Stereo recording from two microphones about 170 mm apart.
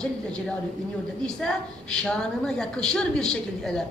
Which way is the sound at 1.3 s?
5° left (ahead or behind).